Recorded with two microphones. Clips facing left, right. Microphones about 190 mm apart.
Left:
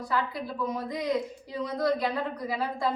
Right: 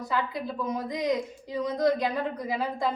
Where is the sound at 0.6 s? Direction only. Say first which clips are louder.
Even; 20° right (ahead or behind).